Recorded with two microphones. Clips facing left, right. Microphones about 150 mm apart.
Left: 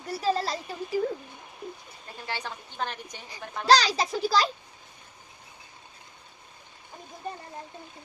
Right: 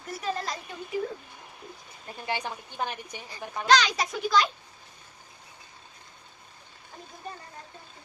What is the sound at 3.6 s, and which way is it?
Speech, 35° left (ahead or behind).